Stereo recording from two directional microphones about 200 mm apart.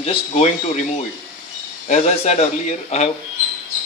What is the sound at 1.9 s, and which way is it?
Speech, 35° left (ahead or behind).